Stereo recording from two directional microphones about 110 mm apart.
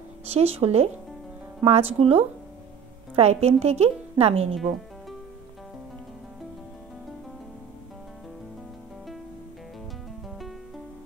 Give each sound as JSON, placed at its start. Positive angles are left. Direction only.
{"t": 0.3, "sound": "speech", "side_deg": -65}
{"t": 3.2, "sound": "a woman's voice", "side_deg": -75}